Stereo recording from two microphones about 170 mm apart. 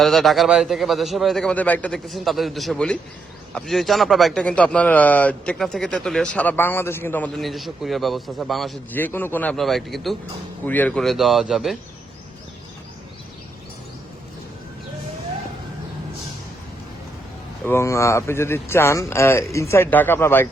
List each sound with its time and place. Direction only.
0.0 s speech: centre (ahead or behind)
8.9 s speech: 10° left (ahead or behind)
17.7 s speech: 15° left (ahead or behind)